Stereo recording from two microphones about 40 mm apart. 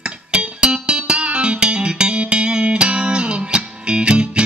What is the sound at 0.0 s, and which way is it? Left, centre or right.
Music, right.